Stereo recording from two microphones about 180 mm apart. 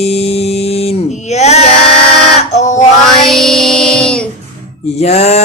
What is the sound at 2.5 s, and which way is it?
Male singing, 40° left (ahead or behind).